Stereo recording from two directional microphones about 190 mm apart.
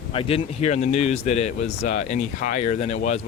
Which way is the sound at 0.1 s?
30° left (ahead or behind).